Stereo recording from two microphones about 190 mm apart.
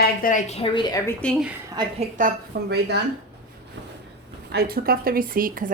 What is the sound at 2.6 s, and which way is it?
Speech, 60° right (ahead or behind).